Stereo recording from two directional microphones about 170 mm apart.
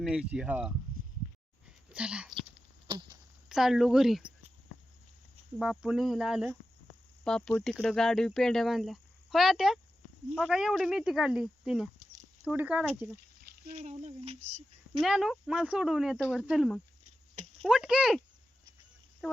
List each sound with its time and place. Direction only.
0.1 s speech: 5° right (ahead or behind)
1.9 s speech: 5° right (ahead or behind)
2.8 s a sound: 30° right (ahead or behind)
3.5 s speech: centre (ahead or behind)
5.5 s speech: 5° right (ahead or behind)
13.1 s a sound: 65° right (ahead or behind)
13.7 s speech: 40° right (ahead or behind)
15.0 s speech: centre (ahead or behind)